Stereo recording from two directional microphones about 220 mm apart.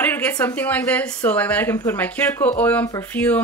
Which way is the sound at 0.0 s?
5° left (ahead or behind).